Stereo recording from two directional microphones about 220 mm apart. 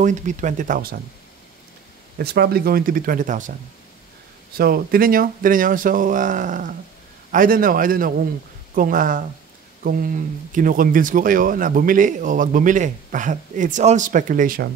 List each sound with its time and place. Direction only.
0.0 s speech: 35° right (ahead or behind)
2.1 s speech: 45° right (ahead or behind)
4.6 s speech: 40° right (ahead or behind)